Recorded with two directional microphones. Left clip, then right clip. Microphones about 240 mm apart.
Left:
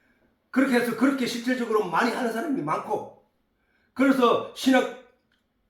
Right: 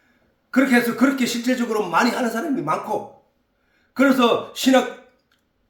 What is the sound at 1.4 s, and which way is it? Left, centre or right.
Speech, right.